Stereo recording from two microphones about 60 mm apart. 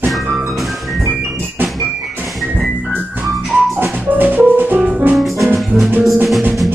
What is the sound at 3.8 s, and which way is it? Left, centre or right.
Music, right.